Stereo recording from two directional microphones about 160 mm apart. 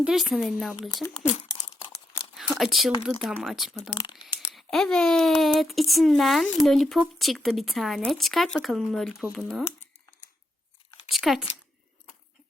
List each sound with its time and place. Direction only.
0.0 s speech: centre (ahead or behind)
2.6 s speech: centre (ahead or behind)
3.9 s a sound: 30° left (ahead or behind)
4.4 s speech: centre (ahead or behind)
11.1 s speech: centre (ahead or behind)